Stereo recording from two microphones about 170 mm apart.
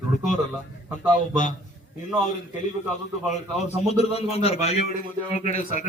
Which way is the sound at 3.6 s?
40° left (ahead or behind).